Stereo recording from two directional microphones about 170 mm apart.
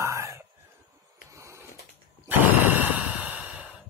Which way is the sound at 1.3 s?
15° right (ahead or behind).